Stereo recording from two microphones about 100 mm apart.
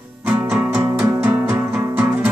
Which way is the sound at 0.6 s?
20° right (ahead or behind).